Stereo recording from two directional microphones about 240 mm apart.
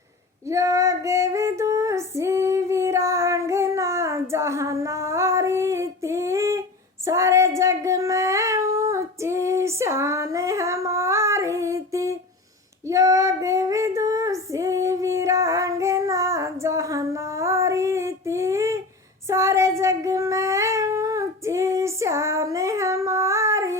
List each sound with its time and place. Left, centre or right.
0.4 s female singing: centre
7.0 s child singing: centre
12.9 s female singing: centre
19.3 s child singing: centre